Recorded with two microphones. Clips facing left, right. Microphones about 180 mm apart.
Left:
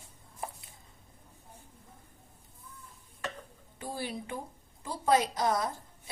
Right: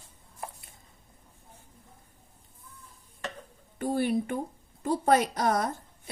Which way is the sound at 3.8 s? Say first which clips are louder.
Right 11 dB; 55° right (ahead or behind).